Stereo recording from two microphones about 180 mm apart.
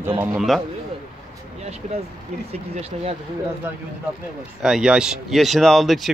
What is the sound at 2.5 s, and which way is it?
Speech, 35° right (ahead or behind).